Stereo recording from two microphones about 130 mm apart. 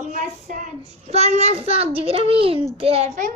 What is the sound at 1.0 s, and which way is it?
A child's voice, 55° right (ahead or behind).